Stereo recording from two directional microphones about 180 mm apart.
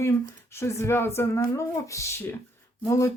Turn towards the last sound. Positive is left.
turn(degrees=15)  # may be behind; listen again after turning